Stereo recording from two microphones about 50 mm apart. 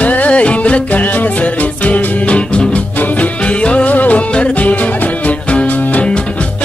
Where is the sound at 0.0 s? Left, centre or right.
Left.